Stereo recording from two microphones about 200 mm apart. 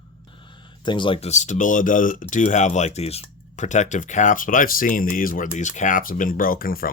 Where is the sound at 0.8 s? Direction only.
25° left (ahead or behind).